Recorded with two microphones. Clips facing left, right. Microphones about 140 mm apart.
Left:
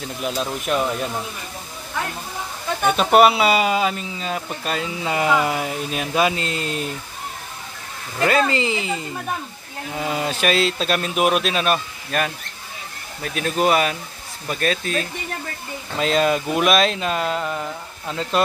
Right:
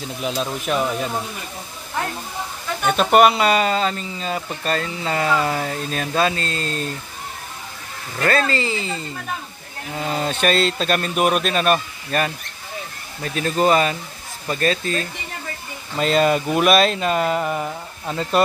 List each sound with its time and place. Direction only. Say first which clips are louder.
0.4 s speech: even; centre (ahead or behind)
2.9 s speech: even; centre (ahead or behind)
8.2 s speech: left 1 dB; 15° left (ahead or behind); by 18.4 s 5° right (ahead or behind)